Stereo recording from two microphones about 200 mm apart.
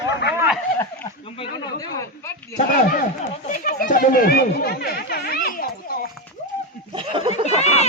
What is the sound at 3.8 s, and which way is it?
Speech, 45° left (ahead or behind).